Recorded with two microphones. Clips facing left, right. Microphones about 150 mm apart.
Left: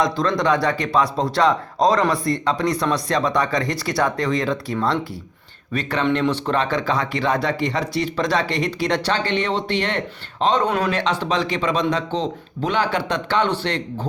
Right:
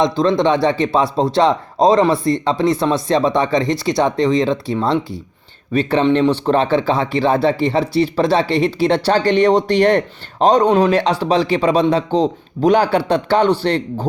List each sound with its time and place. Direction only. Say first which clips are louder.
0.0 s a man's voice: right 5 dB; 25° right (ahead or behind)